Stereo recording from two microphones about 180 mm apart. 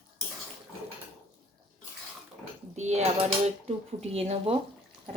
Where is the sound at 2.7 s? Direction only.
40° right (ahead or behind).